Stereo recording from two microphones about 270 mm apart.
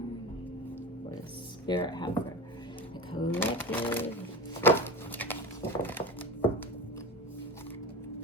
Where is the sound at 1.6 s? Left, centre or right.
Centre.